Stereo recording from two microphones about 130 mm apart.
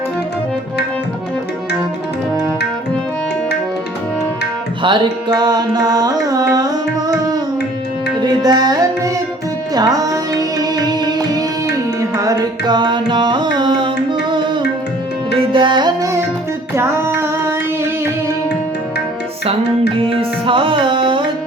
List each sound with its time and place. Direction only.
4.8 s music: 35° right (ahead or behind)
8.2 s music: 30° right (ahead or behind)
11.9 s carnatic music: 25° right (ahead or behind)
15.3 s music: 40° right (ahead or behind)
16.7 s a sound: 20° right (ahead or behind)
20.0 s music: 45° right (ahead or behind)